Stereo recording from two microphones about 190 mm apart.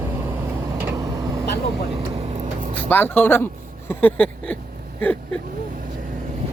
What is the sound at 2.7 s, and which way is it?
Speech, 10° left (ahead or behind).